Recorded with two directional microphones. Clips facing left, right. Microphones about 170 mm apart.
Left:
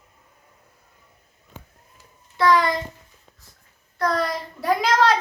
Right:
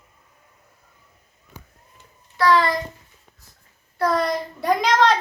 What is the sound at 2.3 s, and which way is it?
Speech, 20° left (ahead or behind).